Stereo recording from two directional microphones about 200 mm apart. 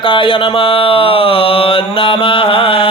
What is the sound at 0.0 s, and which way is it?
Mantra, 25° left (ahead or behind).